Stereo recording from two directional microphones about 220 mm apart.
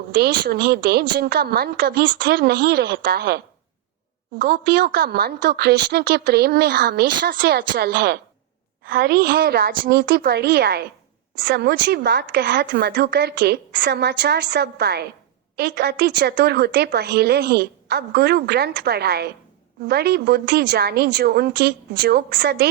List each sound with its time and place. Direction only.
0.2 s a woman's voice: 45° right (ahead or behind)